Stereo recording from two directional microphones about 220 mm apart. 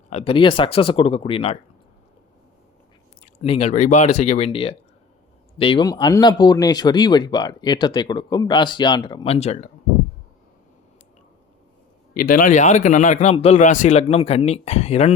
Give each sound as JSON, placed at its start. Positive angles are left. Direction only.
{"t": 0.1, "sound": "speech", "side_deg": 25}
{"t": 3.4, "sound": "speech", "side_deg": 25}
{"t": 12.1, "sound": "a man's voice", "side_deg": 40}